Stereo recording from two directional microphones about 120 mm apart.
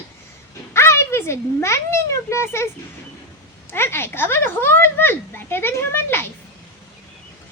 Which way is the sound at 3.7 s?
20° left (ahead or behind).